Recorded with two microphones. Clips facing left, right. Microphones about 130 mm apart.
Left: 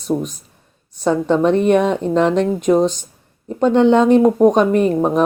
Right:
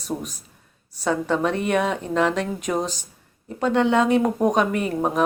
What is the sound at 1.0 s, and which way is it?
Speech, 25° left (ahead or behind).